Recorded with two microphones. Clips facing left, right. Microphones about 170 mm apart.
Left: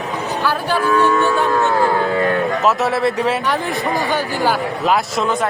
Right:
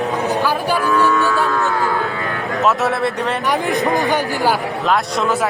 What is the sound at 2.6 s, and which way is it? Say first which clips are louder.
Speech: right 4 dB; centre (ahead or behind).